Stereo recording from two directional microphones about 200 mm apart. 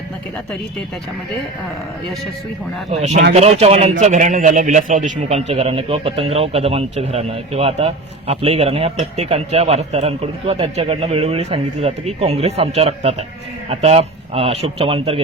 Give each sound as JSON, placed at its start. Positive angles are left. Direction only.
{"t": 2.9, "sound": "a man's voice", "side_deg": -35}